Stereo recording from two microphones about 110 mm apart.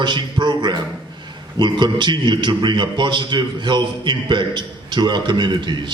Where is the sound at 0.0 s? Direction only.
45° right (ahead or behind).